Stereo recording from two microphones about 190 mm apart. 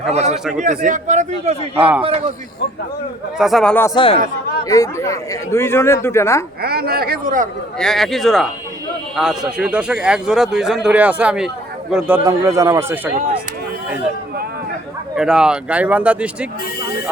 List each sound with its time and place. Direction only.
0.1 s speech: 35° right (ahead or behind)
1.7 s speech: 10° right (ahead or behind)
2.0 s speech: 35° right (ahead or behind)
3.3 s speech: centre (ahead or behind)
3.8 s speech: 25° left (ahead or behind)
6.6 s a sound: 55° right (ahead or behind)
7.8 s speech: centre (ahead or behind)
12.2 s speech: 15° right (ahead or behind)
15.1 s speech: 5° right (ahead or behind)